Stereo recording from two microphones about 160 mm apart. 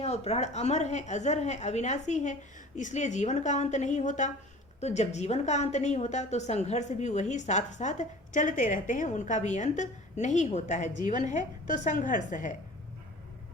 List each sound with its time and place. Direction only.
0.0 s a woman's voice: 40° left (ahead or behind)